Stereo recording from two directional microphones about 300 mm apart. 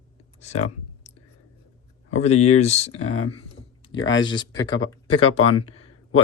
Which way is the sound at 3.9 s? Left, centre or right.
Left.